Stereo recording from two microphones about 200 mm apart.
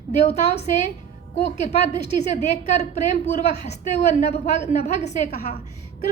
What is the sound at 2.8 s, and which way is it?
A woman's voice, 35° left (ahead or behind).